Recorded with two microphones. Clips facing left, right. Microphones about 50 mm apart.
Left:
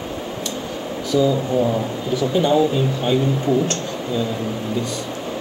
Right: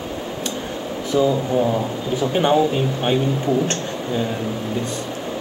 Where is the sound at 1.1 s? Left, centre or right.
Right.